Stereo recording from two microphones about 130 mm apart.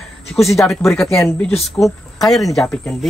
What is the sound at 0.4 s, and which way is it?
Speech, centre (ahead or behind).